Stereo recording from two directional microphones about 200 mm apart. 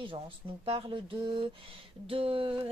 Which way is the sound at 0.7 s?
25° right (ahead or behind).